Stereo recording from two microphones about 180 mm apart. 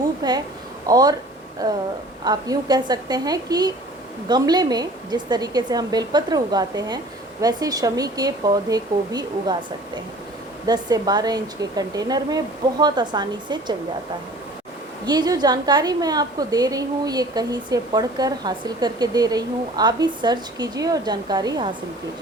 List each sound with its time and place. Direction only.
0.2 s a woman's voice: 20° right (ahead or behind)
2.2 s a woman's voice: 20° right (ahead or behind)
10.7 s a woman's voice: 20° right (ahead or behind)
15.0 s a woman's voice: 25° right (ahead or behind)